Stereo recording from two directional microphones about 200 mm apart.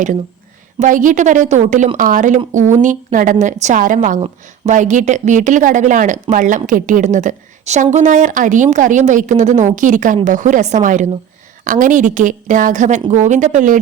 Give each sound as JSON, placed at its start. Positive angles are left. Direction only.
{"t": 0.8, "sound": "a woman's voice", "side_deg": -40}